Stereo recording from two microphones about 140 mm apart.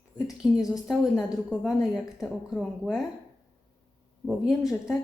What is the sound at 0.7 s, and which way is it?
A woman's voice, centre (ahead or behind).